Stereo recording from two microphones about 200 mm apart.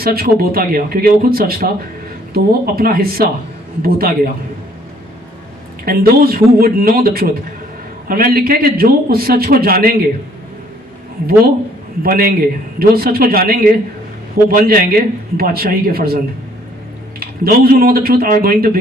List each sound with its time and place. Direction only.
0.0 s a man's voice: 50° right (ahead or behind)
5.8 s a man's voice: 50° right (ahead or behind)
12.0 s a man's voice: 50° right (ahead or behind)